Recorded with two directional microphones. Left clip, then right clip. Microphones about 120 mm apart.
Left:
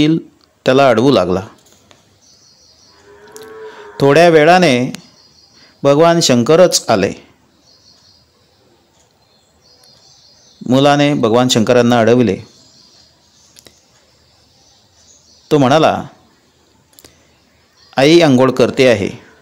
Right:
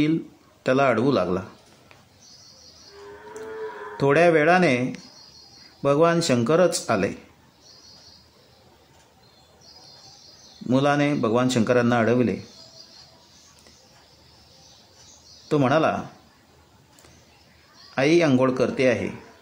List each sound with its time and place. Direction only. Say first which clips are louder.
0.7 s speech: left 10 dB; 90° left
3.9 s speech: left 10 dB; 70° left (ahead or behind)
10.7 s speech: left 10 dB; 90° left
15.4 s speech: left 10 dB; 75° left (ahead or behind); by 16.0 s 90° left
17.9 s speech: left 11 dB; 90° left